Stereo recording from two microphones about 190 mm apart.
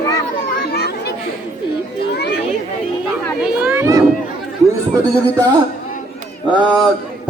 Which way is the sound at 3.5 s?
10° right (ahead or behind).